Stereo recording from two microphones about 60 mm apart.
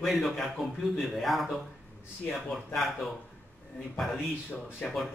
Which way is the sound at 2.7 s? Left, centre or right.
Centre.